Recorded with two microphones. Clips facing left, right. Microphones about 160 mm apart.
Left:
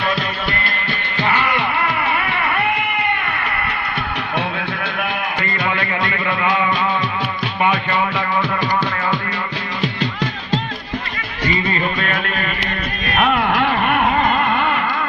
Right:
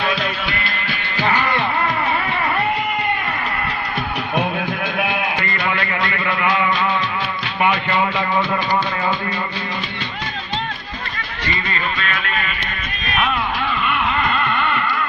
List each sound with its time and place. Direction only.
1.2 s music: 10° right (ahead or behind)
4.9 s sheep: 20° right (ahead or behind)
5.7 s speech: 25° left (ahead or behind)
11.9 s music: 45° left (ahead or behind)